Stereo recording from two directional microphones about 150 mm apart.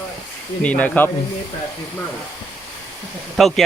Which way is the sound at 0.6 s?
10° left (ahead or behind).